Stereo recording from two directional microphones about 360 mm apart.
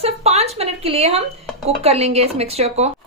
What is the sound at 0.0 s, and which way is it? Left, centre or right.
A woman's voice, centre.